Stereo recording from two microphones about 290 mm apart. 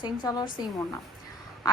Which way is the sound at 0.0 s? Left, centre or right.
Centre.